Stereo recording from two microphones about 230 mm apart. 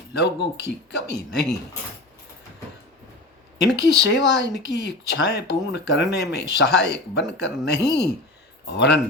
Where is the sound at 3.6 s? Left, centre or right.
Left.